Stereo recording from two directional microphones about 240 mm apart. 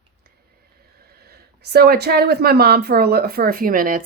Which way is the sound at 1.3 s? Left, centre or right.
Right.